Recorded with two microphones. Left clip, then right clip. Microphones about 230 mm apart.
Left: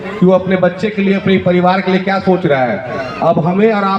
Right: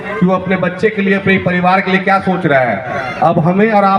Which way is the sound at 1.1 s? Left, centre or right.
Right.